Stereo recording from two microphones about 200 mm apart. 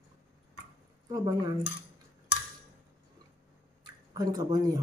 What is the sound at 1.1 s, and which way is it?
Speech, 25° right (ahead or behind).